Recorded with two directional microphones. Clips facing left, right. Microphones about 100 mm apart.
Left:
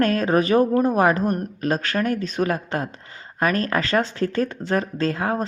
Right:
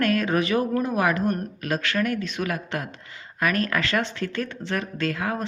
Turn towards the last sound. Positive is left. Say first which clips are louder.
# left 4 dB
turn(degrees=35)  # may be behind; listen again after turning